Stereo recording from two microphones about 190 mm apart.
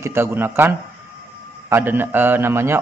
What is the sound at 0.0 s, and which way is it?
Speech, 10° right (ahead or behind).